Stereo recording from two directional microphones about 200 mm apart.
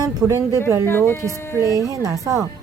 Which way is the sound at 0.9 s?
10° left (ahead or behind).